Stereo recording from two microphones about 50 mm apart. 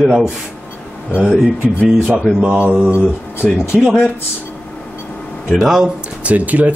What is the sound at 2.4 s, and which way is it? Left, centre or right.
Speech, right.